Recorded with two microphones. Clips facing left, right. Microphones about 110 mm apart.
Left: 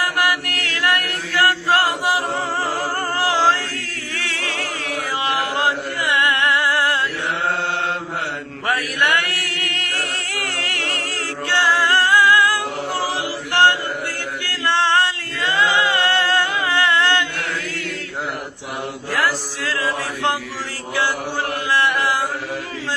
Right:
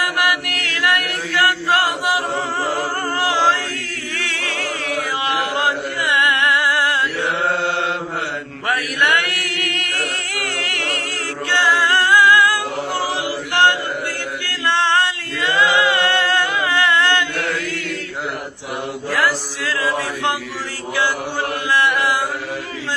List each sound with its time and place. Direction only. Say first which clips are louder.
0.0 s chant: even; 30° left (ahead or behind)
4.1 s choir: even; 35° left (ahead or behind)
5.5 s chant: right 1 dB; 30° left (ahead or behind)
8.6 s chant: right 1 dB; 25° left (ahead or behind)
11.7 s a capella: right 1 dB; 30° left (ahead or behind)
13.5 s chant: even; 30° left (ahead or behind)
19.6 s chant: right 2 dB; 30° left (ahead or behind)
21.7 s chant: right 1 dB; 30° left (ahead or behind)